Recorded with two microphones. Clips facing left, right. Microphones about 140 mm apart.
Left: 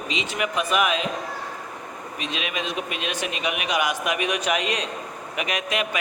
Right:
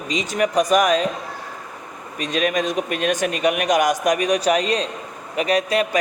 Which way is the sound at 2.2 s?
45° right (ahead or behind).